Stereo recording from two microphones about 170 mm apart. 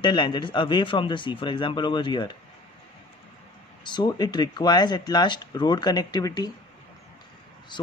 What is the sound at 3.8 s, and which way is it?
A man's voice, 25° left (ahead or behind).